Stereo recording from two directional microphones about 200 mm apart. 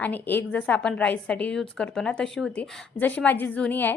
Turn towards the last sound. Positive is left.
turn(degrees=10)  # may be behind; listen again after turning